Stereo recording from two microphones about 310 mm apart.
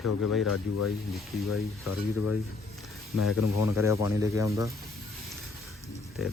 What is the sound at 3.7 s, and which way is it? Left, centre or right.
Speech, centre.